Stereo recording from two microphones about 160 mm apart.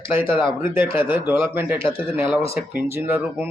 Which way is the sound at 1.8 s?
35° left (ahead or behind).